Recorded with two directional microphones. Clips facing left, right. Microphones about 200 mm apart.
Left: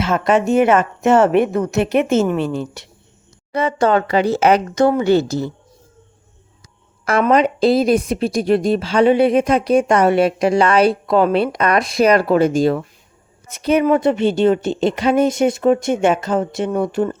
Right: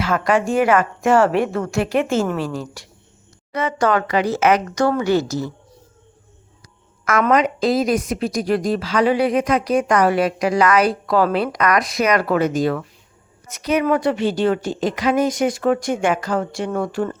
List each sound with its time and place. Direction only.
0.0 s a woman's voice: 25° left (ahead or behind)
7.0 s a woman's voice: 30° left (ahead or behind)